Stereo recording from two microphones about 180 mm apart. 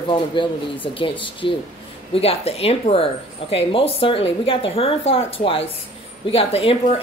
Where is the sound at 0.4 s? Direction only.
25° left (ahead or behind).